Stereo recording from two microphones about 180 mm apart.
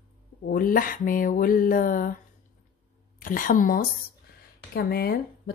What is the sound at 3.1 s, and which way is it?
A woman's voice, 50° left (ahead or behind).